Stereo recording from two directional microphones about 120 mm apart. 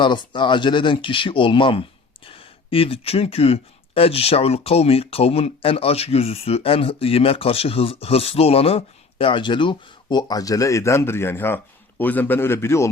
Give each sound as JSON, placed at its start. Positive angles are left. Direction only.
{"t": 0.0, "sound": "speech", "side_deg": 40}